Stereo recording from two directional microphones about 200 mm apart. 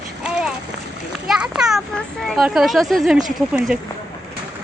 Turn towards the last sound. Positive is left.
turn(degrees=-5)  # may be behind; listen again after turning